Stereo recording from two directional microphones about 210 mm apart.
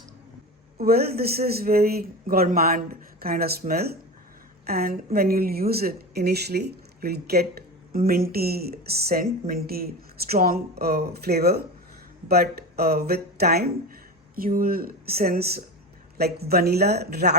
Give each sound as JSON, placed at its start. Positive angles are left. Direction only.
{"t": 0.8, "sound": "speech", "side_deg": -45}